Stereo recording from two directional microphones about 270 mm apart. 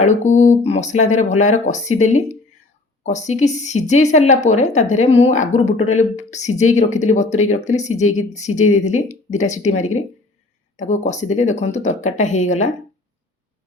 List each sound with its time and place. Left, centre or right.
0.0 s speech: left